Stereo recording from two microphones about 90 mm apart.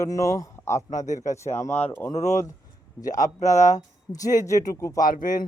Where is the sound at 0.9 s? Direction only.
90° left.